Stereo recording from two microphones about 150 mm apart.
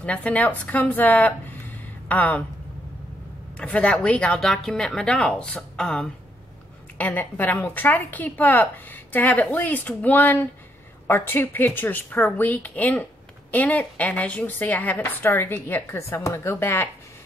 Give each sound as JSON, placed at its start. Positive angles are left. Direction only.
{"t": 0.0, "sound": "speech", "side_deg": 10}
{"t": 3.5, "sound": "speech", "side_deg": 10}